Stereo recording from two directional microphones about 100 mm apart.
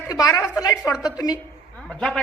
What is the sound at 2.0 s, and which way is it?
Speech, 10° left (ahead or behind).